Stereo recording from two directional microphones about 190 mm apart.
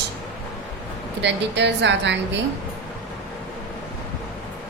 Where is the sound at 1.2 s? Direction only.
65° right (ahead or behind).